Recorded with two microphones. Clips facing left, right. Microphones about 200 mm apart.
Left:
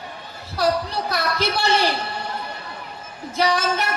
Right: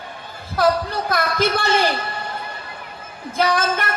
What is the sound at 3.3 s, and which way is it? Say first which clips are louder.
Speech: right 1 dB; 55° right (ahead or behind).